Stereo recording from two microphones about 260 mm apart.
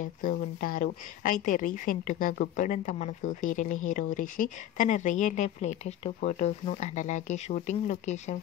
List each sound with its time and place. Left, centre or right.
0.0 s a woman's voice: left